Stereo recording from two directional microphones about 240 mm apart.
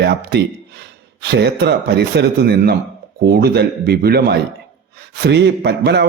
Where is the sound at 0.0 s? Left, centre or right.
Right.